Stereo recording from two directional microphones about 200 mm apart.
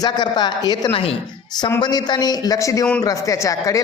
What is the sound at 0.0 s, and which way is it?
A man's voice, 20° left (ahead or behind).